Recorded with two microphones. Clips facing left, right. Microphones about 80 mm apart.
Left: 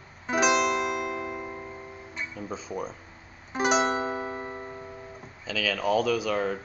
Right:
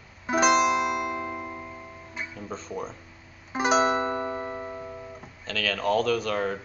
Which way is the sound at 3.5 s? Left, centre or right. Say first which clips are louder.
Right 2 dB; centre.